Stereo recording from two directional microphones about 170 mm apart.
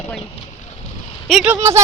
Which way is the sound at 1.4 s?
15° right (ahead or behind).